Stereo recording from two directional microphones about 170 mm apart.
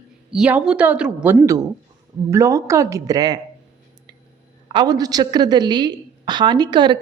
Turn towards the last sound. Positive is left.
turn(degrees=-25)  # may be behind; listen again after turning